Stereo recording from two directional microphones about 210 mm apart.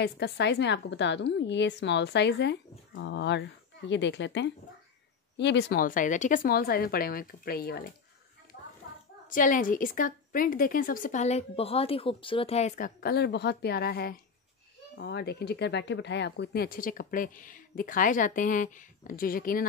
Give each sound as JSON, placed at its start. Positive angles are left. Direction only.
{"t": 0.0, "sound": "a woman's voice", "side_deg": 55}
{"t": 9.3, "sound": "a woman's voice", "side_deg": 40}